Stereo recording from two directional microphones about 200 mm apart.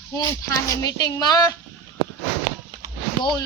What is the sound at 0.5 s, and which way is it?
A woman's voice, 15° left (ahead or behind).